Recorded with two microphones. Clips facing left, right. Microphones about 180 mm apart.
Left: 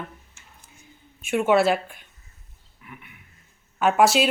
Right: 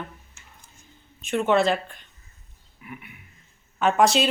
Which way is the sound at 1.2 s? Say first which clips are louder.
Left 2 dB; 10° left (ahead or behind).